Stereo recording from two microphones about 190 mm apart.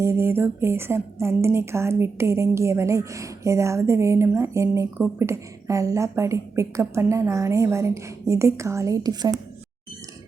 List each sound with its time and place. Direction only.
0.0 s a woman's voice: 15° right (ahead or behind)